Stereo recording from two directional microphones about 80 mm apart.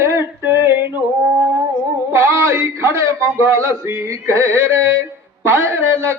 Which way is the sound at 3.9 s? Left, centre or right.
Right.